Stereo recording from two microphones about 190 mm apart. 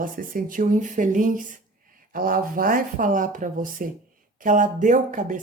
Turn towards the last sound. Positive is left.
turn(degrees=-45)  # may be behind; listen again after turning